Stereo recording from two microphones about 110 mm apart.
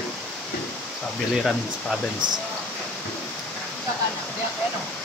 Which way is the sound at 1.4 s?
5° left (ahead or behind).